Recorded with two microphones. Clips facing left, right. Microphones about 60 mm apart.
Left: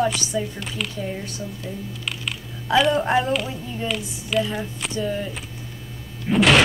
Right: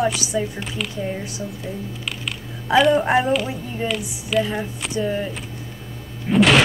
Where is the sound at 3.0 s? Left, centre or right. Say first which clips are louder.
Right 2 dB; centre.